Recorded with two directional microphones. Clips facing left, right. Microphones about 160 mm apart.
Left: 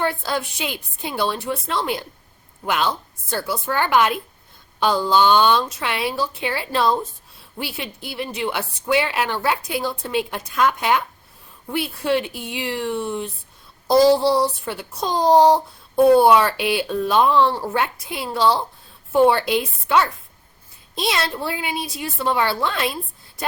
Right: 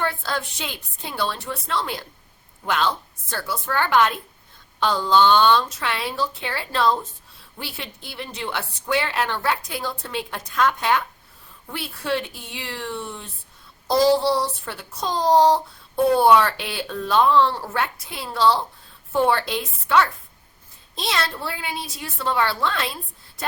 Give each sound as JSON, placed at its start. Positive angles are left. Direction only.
{"t": 0.0, "sound": "a woman's voice", "side_deg": 15}